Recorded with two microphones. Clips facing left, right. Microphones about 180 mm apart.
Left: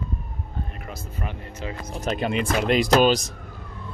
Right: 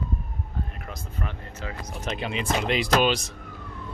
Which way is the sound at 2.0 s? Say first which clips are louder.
Left 6 dB; 40° left (ahead or behind).